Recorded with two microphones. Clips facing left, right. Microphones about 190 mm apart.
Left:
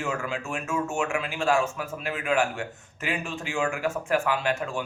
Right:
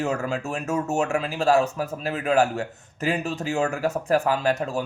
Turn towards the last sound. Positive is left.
turn(degrees=-40)  # may be behind; listen again after turning